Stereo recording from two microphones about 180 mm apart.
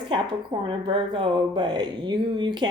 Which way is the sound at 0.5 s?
30° right (ahead or behind).